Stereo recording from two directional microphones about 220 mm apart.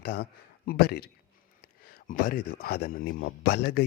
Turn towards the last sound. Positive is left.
turn(degrees=45)  # may be behind; listen again after turning